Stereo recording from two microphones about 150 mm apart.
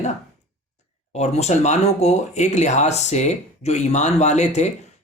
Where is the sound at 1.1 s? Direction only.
45° left (ahead or behind).